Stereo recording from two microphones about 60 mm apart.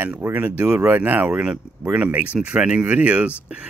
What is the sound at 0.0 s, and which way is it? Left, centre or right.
Speech, right.